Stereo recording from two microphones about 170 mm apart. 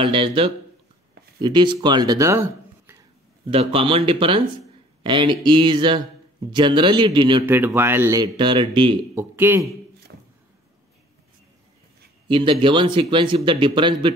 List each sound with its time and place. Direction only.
0.0 s speech: 30° right (ahead or behind); by 3.0 s 15° right (ahead or behind)
3.4 s speech: 30° right (ahead or behind)
7.4 s speech: 10° right (ahead or behind); by 8.9 s 30° right (ahead or behind)
9.1 s speech: 15° right (ahead or behind)
12.3 s speech: 30° right (ahead or behind)